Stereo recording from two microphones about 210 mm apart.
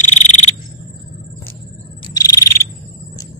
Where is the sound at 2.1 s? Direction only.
15° left (ahead or behind).